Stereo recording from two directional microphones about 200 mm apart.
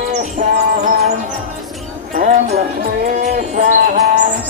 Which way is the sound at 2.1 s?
50° right (ahead or behind).